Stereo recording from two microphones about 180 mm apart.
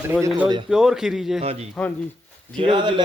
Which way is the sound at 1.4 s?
35° right (ahead or behind).